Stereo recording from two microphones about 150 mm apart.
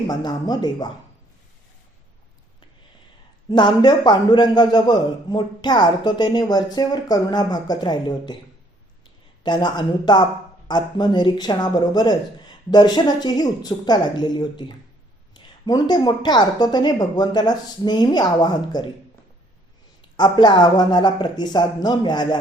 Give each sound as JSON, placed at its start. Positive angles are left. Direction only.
{"t": 0.1, "sound": "a man's voice", "side_deg": 25}
{"t": 3.5, "sound": "a man's voice", "side_deg": 30}
{"t": 9.4, "sound": "a man's voice", "side_deg": 30}
{"t": 20.1, "sound": "a man's voice", "side_deg": 30}